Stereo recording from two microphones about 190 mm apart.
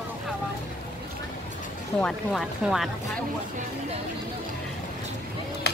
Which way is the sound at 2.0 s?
Centre (ahead or behind).